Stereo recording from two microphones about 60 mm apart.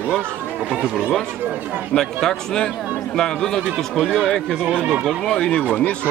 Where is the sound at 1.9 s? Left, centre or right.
Centre.